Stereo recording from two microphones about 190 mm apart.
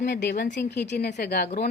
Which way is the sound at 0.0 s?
60° left (ahead or behind).